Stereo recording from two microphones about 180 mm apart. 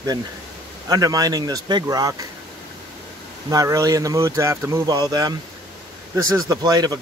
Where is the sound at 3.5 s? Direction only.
20° right (ahead or behind).